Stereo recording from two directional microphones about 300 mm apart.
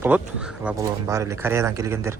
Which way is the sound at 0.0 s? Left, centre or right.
Centre.